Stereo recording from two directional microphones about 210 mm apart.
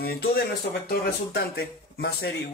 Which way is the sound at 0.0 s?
45° left (ahead or behind).